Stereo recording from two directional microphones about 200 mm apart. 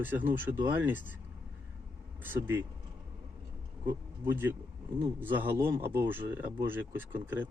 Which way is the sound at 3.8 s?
10° right (ahead or behind).